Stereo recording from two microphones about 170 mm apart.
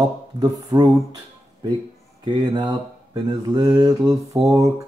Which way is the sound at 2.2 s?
25° right (ahead or behind).